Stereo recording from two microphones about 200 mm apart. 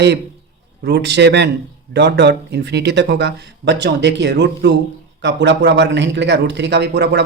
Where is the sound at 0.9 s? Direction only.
55° right (ahead or behind).